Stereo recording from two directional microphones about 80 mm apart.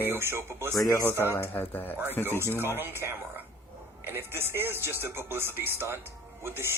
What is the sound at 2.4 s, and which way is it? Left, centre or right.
Speech, right.